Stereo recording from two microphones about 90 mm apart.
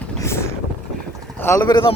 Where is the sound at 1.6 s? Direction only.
60° left (ahead or behind).